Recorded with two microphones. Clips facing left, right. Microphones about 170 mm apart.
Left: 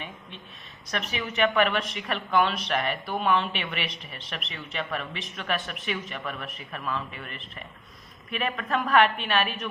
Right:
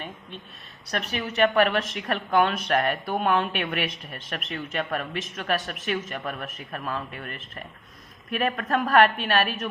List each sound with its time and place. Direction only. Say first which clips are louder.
0.9 s a woman's voice: right 2 dB; 40° right (ahead or behind)